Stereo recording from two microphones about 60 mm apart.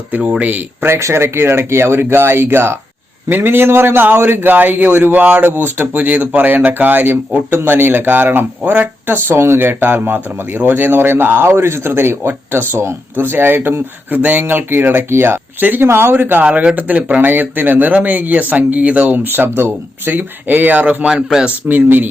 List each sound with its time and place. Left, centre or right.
0.2 s speech: right
0.9 s a man's voice: right
16.4 s speech: right
21.0 s speech: centre
21.7 s a man's voice: right